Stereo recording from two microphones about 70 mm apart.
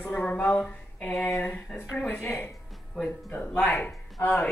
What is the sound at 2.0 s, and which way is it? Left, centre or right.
Speech, left.